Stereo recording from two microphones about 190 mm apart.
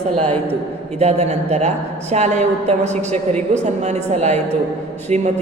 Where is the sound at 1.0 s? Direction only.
35° right (ahead or behind).